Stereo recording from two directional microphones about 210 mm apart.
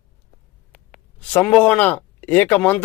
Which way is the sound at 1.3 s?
5° left (ahead or behind).